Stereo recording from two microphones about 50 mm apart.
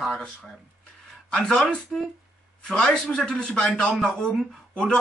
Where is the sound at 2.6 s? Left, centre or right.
Centre.